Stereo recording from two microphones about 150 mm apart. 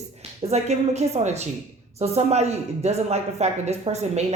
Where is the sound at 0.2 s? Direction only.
45° right (ahead or behind).